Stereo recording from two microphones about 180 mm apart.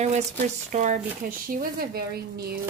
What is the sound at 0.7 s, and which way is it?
Speech, 40° right (ahead or behind).